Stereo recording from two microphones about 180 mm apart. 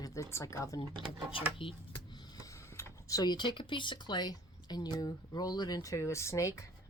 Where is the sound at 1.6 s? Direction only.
30° left (ahead or behind).